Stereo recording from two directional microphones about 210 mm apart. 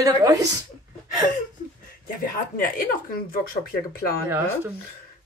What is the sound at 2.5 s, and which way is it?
Speech, 45° left (ahead or behind).